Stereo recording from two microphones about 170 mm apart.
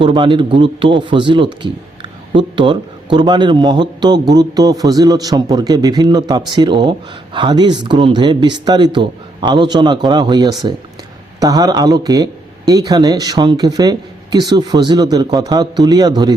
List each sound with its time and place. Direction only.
0.0 s a man's voice: 30° right (ahead or behind)